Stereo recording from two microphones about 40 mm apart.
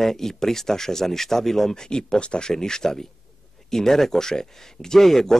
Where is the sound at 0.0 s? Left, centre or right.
Centre.